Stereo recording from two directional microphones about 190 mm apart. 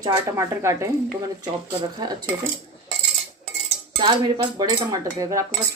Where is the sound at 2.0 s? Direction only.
20° right (ahead or behind).